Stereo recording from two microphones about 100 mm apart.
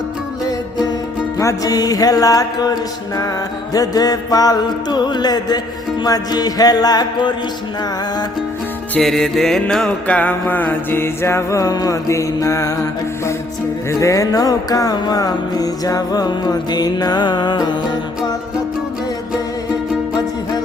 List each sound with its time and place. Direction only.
1.4 s music: 35° left (ahead or behind)
9.0 s music: centre (ahead or behind); by 12.7 s 30° left (ahead or behind)
14.0 s music: 35° left (ahead or behind)